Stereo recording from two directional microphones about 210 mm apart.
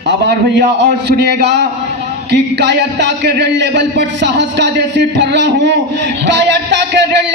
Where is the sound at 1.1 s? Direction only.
50° right (ahead or behind).